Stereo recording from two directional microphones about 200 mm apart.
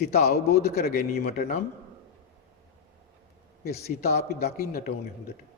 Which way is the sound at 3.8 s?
55° left (ahead or behind).